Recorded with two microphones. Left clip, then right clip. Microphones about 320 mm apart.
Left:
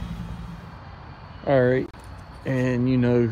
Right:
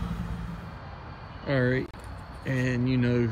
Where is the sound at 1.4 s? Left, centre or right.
Centre.